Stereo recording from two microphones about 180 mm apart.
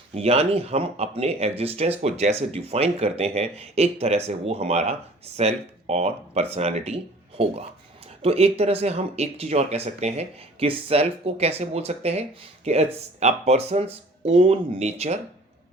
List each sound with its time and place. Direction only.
0.1 s speech: 35° right (ahead or behind)